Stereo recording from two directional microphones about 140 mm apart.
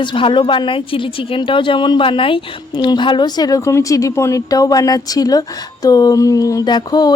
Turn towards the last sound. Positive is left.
turn(degrees=30)  # may be behind; listen again after turning